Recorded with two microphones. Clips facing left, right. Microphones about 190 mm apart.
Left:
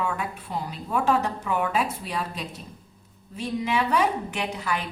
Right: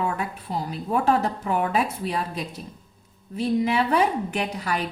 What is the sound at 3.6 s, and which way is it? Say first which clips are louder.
A woman's voice: even; 35° right (ahead or behind).